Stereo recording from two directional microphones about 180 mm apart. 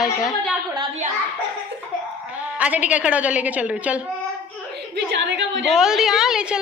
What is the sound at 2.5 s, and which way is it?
Speech, 10° right (ahead or behind).